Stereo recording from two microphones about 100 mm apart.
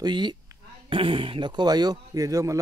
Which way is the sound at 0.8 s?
60° right (ahead or behind).